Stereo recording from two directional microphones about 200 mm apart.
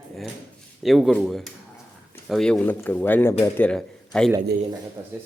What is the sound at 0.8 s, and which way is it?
A man's voice, centre (ahead or behind).